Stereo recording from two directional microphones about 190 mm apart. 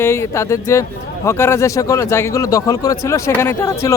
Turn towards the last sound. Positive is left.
turn(degrees=15)  # may be behind; listen again after turning